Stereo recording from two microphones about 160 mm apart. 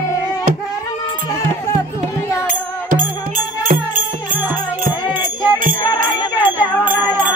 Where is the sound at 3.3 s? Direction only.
55° right (ahead or behind).